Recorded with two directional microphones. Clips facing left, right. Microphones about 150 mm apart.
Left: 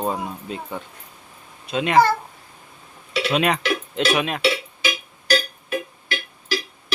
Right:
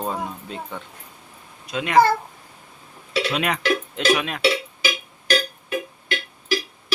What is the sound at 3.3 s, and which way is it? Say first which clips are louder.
A child's voice: left 3 dB; 25° left (ahead or behind).